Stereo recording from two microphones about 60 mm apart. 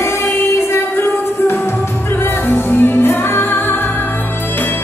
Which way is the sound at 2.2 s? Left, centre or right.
Left.